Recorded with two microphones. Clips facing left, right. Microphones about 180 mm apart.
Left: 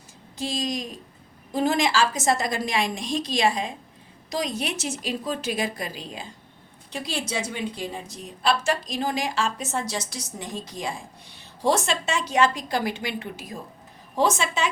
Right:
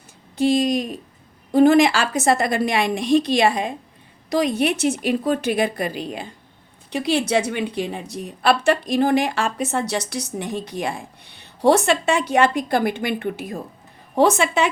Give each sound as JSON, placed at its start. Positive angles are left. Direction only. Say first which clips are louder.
{"t": 0.3, "sound": "a woman's voice", "louder": "right 10 dB", "side_deg": -60}